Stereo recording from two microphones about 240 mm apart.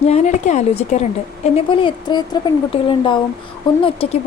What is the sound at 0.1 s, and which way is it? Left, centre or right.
A woman's voice, left.